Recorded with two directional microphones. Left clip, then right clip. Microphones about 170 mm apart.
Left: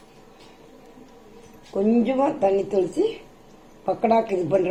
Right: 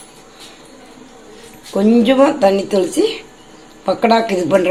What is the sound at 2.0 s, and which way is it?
Speech, 40° right (ahead or behind).